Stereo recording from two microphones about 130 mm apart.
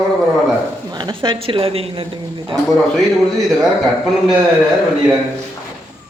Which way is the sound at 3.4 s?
Centre (ahead or behind).